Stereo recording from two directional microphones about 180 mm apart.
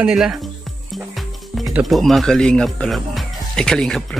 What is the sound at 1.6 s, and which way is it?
Speech, centre (ahead or behind).